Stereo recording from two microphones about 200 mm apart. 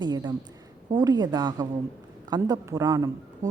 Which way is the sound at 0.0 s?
20° right (ahead or behind).